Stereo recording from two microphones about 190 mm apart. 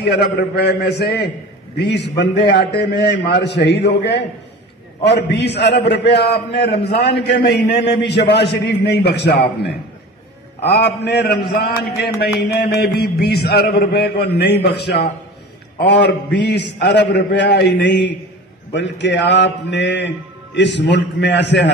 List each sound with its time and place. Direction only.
0.0 s a man's voice: 60° left (ahead or behind)
10.6 s a man's voice: 60° left (ahead or behind)